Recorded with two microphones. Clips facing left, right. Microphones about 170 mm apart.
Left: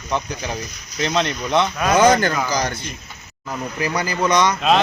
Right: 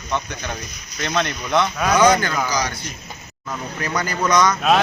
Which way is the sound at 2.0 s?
45° left (ahead or behind).